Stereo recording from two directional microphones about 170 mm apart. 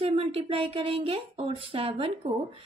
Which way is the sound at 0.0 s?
35° right (ahead or behind).